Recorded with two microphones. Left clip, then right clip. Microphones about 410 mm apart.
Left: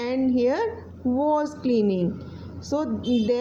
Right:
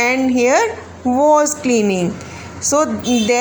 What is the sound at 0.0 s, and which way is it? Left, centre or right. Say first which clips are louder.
A woman's voice: right 8 dB; left.